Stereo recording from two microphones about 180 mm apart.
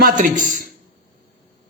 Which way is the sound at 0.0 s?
50° right (ahead or behind).